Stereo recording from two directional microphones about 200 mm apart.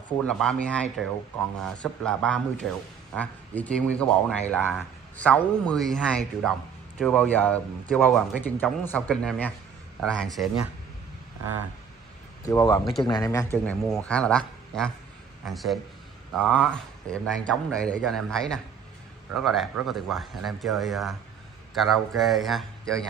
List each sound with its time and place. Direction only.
0.2 s speech: 5° left (ahead or behind)
12.4 s speech: 20° left (ahead or behind)
13.7 s speech: 5° left (ahead or behind)